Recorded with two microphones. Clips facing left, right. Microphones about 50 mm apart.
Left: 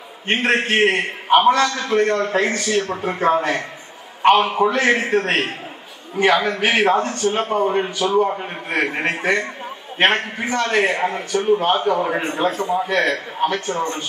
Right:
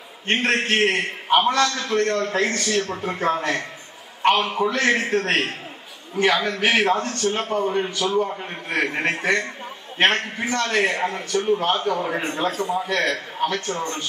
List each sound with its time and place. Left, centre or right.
0.3 s a man's voice: centre